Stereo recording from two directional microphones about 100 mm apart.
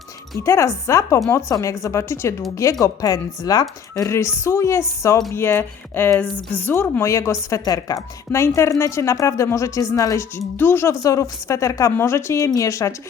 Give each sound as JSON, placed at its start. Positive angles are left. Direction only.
{"t": 0.4, "sound": "a woman's voice", "side_deg": 30}
{"t": 2.8, "sound": "speech", "side_deg": 35}
{"t": 7.6, "sound": "a woman's voice", "side_deg": 40}
{"t": 10.9, "sound": "a woman's voice", "side_deg": 35}